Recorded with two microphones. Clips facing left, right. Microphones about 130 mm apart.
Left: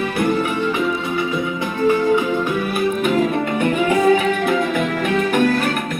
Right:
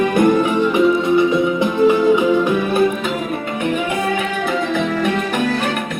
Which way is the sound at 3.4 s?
45° left (ahead or behind).